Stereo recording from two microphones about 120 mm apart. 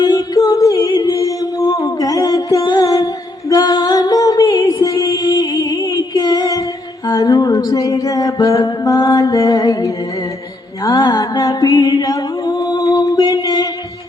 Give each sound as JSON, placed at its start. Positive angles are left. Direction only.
{"t": 0.0, "sound": "a capella", "side_deg": 35}
{"t": 3.5, "sound": "music", "side_deg": 35}